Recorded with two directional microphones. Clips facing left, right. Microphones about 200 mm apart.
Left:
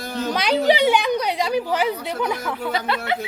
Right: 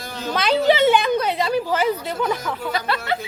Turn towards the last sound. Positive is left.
turn(degrees=20)  # may be behind; listen again after turning